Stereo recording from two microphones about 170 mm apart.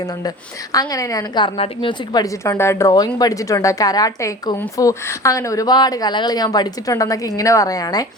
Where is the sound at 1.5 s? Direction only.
30° left (ahead or behind).